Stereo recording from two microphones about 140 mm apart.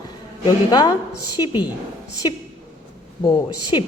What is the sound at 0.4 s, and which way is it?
A woman's voice, 30° left (ahead or behind).